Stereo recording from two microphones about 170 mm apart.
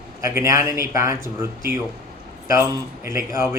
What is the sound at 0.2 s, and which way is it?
Speech, 15° right (ahead or behind).